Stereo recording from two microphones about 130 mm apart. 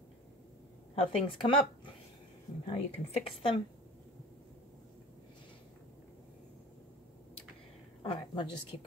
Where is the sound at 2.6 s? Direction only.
40° left (ahead or behind).